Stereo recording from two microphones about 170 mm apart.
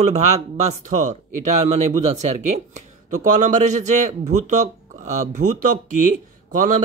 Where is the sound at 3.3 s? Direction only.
45° right (ahead or behind).